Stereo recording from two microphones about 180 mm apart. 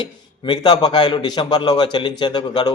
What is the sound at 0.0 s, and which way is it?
A man's voice, 25° left (ahead or behind).